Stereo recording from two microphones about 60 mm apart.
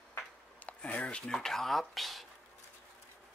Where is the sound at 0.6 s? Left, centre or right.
Left.